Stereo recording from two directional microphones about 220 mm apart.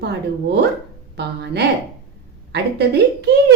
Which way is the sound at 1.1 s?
50° right (ahead or behind).